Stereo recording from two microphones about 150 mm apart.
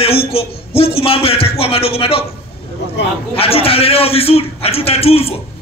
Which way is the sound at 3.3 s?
40° left (ahead or behind).